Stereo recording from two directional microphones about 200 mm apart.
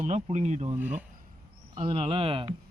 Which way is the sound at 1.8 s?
25° right (ahead or behind).